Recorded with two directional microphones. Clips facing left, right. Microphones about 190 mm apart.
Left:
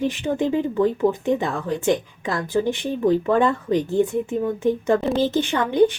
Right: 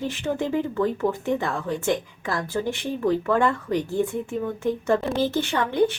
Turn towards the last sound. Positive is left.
turn(degrees=15)  # may be behind; listen again after turning